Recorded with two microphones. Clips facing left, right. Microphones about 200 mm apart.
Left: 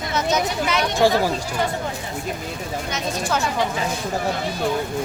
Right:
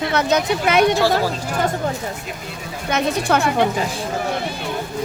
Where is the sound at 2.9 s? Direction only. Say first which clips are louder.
Right 7 dB; 60° right (ahead or behind).